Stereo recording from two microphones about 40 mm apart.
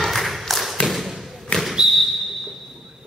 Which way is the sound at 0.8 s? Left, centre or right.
Centre.